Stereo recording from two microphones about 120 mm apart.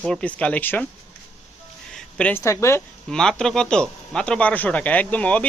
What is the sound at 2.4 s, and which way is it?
Speech, 25° left (ahead or behind).